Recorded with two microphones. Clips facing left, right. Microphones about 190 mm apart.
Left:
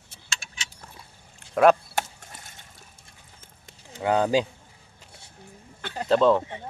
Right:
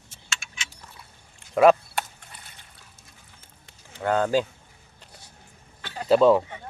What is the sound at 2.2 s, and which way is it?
Liquid, 45° left (ahead or behind).